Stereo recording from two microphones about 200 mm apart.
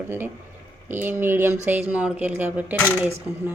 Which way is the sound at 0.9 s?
10° right (ahead or behind).